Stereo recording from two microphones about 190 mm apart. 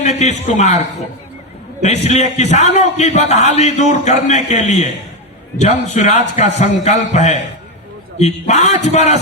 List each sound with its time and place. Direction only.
0.0 s a man's voice: 35° left (ahead or behind)
1.8 s a man's voice: 35° left (ahead or behind)